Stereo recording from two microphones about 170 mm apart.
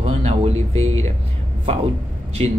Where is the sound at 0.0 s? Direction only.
40° right (ahead or behind).